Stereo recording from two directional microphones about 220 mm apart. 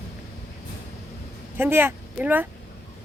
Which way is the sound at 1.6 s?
10° right (ahead or behind).